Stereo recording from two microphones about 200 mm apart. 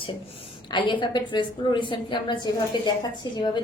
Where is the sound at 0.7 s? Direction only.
25° left (ahead or behind).